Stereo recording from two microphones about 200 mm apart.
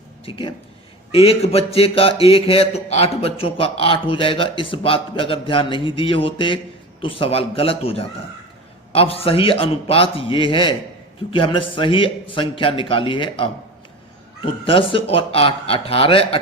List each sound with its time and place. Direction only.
0.3 s speech: 25° left (ahead or behind)